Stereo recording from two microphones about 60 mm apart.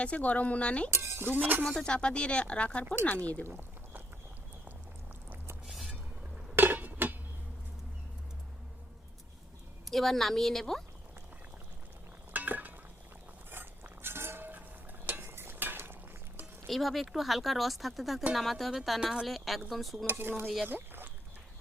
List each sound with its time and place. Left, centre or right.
0.0 s speech: left
0.9 s speech: right
1.6 s speech: centre
3.4 s pour: right
5.6 s music: centre
6.6 s a sound: right
9.8 s speech: centre
12.3 s a sound: right
15.0 s cutlery: right
16.6 s speech: centre
20.1 s speech: right